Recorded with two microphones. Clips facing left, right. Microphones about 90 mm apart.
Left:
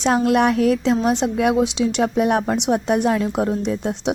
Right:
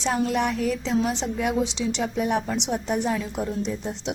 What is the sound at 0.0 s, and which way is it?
Speech, 65° left (ahead or behind).